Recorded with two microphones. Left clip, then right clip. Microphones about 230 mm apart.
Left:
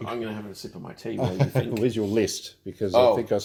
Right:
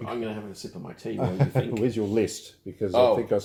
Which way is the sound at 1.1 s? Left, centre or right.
Left.